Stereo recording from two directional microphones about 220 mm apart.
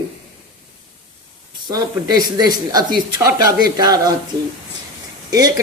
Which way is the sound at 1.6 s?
15° right (ahead or behind).